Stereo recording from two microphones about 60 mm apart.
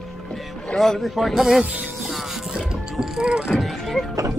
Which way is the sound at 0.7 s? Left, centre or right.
Centre.